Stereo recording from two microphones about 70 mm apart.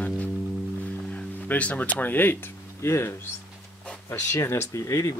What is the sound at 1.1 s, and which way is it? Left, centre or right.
Speech, centre.